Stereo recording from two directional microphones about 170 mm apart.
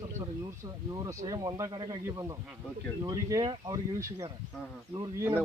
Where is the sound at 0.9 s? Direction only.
20° right (ahead or behind).